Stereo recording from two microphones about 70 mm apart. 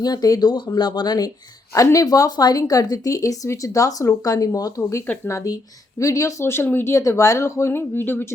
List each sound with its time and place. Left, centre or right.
0.0 s speech: left
1.7 s speech: left
2.6 s speech: left
6.9 s speech: left